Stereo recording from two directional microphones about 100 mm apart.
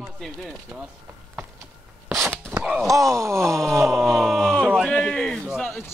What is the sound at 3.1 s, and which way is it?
Wail, 30° right (ahead or behind).